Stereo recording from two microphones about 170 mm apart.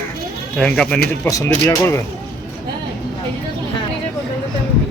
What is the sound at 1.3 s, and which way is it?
Speech, 20° left (ahead or behind).